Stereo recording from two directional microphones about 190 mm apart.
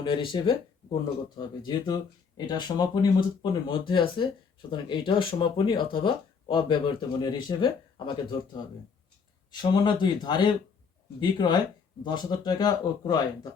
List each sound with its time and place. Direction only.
0.0 s speech: 25° left (ahead or behind)
9.5 s speech: 25° left (ahead or behind)